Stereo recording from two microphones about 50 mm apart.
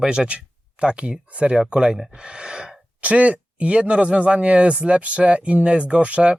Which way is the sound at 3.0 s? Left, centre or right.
Right.